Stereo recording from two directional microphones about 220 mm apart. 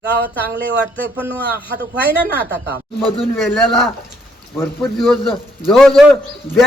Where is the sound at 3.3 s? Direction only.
Centre (ahead or behind).